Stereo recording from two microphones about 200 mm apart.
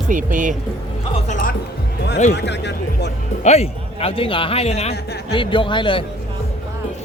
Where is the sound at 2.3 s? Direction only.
60° left (ahead or behind).